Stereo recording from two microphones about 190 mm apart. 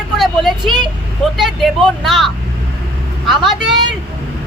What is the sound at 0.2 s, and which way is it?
Vehicle, centre (ahead or behind).